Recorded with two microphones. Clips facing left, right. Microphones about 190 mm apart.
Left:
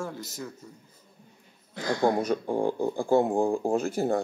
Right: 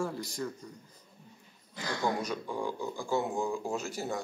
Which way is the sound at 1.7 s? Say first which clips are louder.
Left 8 dB; 55° left (ahead or behind).